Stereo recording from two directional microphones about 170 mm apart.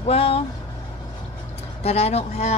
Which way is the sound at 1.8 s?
40° left (ahead or behind).